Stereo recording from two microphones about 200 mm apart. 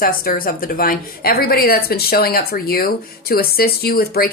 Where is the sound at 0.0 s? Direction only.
45° left (ahead or behind).